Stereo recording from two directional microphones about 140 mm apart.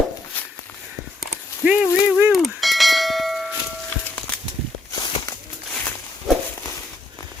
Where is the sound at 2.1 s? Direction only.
15° right (ahead or behind).